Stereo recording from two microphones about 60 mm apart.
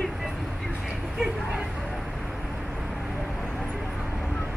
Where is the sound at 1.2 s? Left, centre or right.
Centre.